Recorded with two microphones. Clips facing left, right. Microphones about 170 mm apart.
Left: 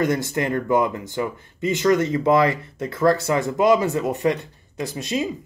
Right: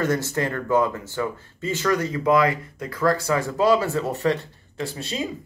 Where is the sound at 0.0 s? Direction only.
15° left (ahead or behind).